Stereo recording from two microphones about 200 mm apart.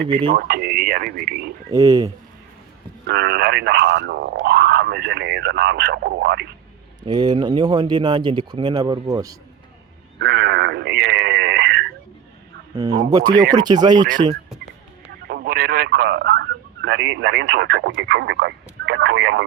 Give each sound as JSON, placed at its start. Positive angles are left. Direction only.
{"t": 0.0, "sound": "speech", "side_deg": -25}
{"t": 0.3, "sound": "radio", "side_deg": -50}
{"t": 1.7, "sound": "speech", "side_deg": -20}
{"t": 3.1, "sound": "speech", "side_deg": -55}
{"t": 7.0, "sound": "speech", "side_deg": -20}
{"t": 10.2, "sound": "a sound", "side_deg": -60}
{"t": 12.7, "sound": "speech", "side_deg": -20}
{"t": 15.3, "sound": "radio", "side_deg": -50}